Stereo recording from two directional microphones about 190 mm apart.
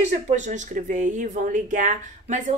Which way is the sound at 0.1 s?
40° right (ahead or behind).